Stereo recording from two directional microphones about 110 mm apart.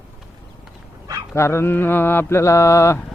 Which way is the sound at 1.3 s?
25° left (ahead or behind).